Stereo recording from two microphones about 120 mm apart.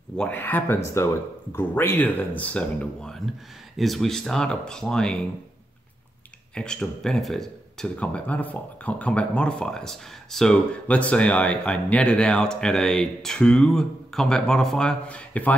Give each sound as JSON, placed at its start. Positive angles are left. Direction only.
{"t": 0.2, "sound": "speech", "side_deg": 15}
{"t": 6.5, "sound": "speech", "side_deg": 5}